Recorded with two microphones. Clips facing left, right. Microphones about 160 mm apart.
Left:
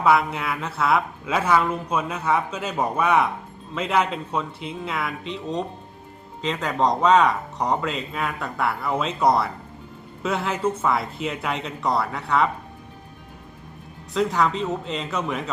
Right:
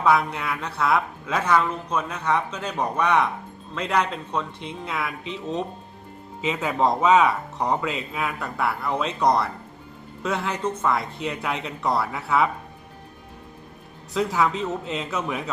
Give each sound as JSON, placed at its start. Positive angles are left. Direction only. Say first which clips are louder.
{"t": 0.0, "sound": "speech", "louder": "left 1 dB", "side_deg": 5}
{"t": 14.1, "sound": "speech", "louder": "left 1 dB", "side_deg": 0}